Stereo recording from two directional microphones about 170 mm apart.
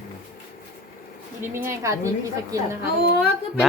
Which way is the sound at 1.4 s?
15° right (ahead or behind).